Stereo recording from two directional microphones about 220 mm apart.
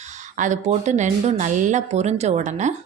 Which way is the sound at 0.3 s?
35° right (ahead or behind).